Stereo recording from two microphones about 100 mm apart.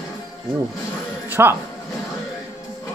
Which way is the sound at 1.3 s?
20° right (ahead or behind).